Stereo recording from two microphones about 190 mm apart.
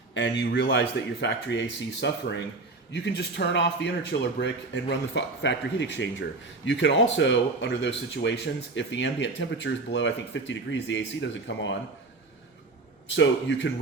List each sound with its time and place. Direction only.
0.1 s speech: 70° left (ahead or behind)
13.1 s speech: 75° left (ahead or behind)